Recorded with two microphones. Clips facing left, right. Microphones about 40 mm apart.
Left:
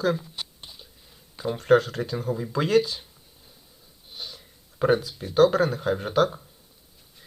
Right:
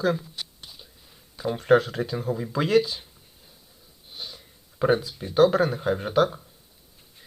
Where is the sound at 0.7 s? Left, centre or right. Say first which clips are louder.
Even; centre.